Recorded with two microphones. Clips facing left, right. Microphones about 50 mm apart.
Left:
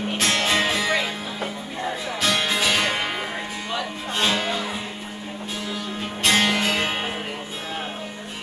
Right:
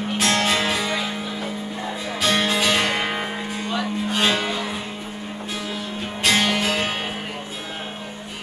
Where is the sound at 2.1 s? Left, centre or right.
Centre.